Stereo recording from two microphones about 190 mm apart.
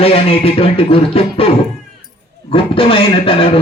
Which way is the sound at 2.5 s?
30° left (ahead or behind).